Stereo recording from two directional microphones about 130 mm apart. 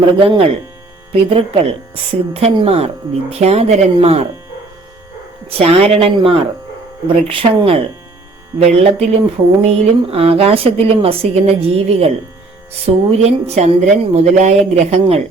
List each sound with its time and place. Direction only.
0.0 s speech: 45° right (ahead or behind)
5.5 s speech: 50° right (ahead or behind)
8.5 s a woman's voice: 55° right (ahead or behind)